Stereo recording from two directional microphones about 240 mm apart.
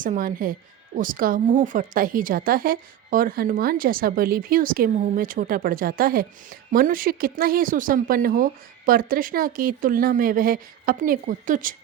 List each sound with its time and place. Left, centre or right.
0.0 s a woman's voice: right